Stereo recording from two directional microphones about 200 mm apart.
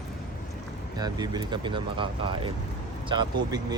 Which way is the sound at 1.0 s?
20° right (ahead or behind).